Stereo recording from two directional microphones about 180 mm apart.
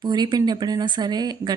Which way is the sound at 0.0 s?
25° right (ahead or behind).